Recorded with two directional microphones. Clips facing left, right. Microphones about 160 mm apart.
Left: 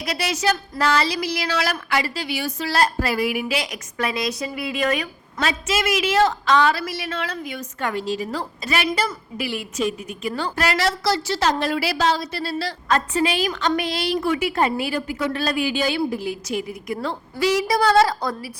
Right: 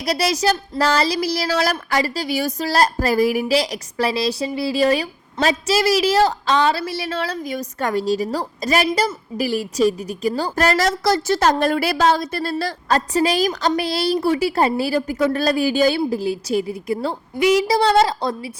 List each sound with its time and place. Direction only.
0.0 s a woman's voice: 35° right (ahead or behind)